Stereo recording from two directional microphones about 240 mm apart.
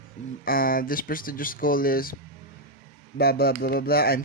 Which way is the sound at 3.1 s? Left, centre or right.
Left.